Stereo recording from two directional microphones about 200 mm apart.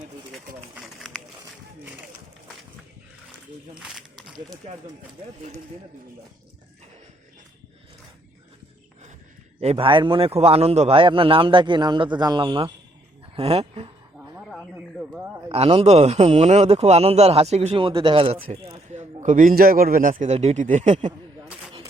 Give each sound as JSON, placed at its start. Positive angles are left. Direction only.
{"t": 0.3, "sound": "run", "side_deg": 0}
{"t": 3.8, "sound": "a sound", "side_deg": 0}
{"t": 9.6, "sound": "a man's voice", "side_deg": -30}
{"t": 15.4, "sound": "a man's voice", "side_deg": -30}